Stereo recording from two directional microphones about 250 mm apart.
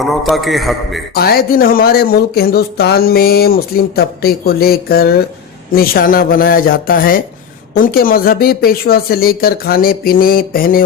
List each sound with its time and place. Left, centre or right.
0.0 s a man's voice: centre
1.1 s speech: left